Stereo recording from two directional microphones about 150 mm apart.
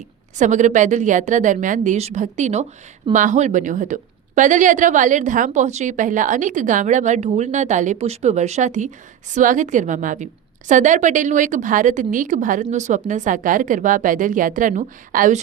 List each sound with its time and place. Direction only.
0.3 s a woman's voice: 55° right (ahead or behind)